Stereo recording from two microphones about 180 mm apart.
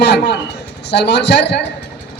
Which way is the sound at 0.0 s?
70° left (ahead or behind).